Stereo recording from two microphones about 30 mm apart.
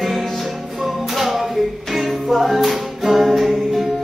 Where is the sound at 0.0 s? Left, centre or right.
Centre.